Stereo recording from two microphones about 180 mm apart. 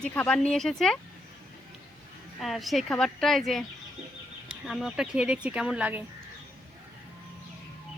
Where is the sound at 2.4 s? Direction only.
Centre (ahead or behind).